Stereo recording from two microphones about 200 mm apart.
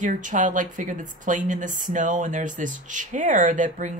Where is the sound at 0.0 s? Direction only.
40° right (ahead or behind).